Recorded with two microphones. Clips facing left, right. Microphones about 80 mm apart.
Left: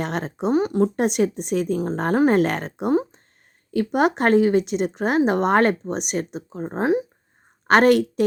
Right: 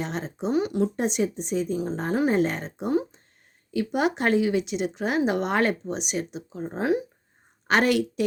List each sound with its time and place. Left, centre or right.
0.0 s speech: left
0.5 s speech: left
0.9 s speech: left
2.9 s speech: left
3.7 s speech: left
7.7 s speech: left